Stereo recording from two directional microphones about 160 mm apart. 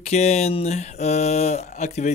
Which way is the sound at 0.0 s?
45° left (ahead or behind).